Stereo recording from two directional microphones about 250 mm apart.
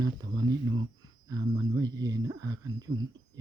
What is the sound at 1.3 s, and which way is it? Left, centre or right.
Speech, centre.